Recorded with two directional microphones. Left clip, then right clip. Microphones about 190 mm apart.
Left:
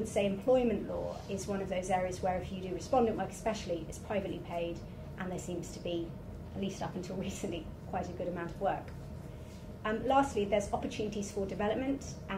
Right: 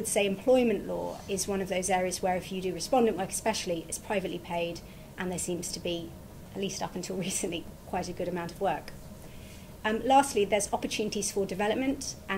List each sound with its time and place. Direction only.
0.1 s a woman's voice: 55° right (ahead or behind)
9.8 s a woman's voice: 55° right (ahead or behind)